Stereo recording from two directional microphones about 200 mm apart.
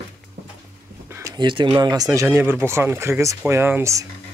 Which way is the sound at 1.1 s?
15° right (ahead or behind).